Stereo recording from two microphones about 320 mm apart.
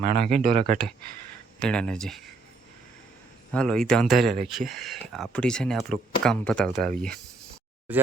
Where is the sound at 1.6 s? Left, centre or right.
Centre.